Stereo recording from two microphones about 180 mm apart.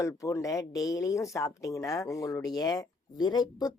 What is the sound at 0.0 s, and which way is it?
Speech, 15° left (ahead or behind).